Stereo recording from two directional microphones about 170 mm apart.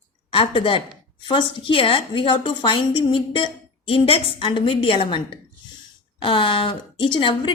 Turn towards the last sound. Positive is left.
turn(degrees=30)  # may be behind; listen again after turning